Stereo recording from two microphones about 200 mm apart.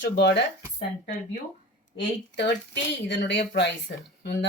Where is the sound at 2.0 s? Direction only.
60° left (ahead or behind).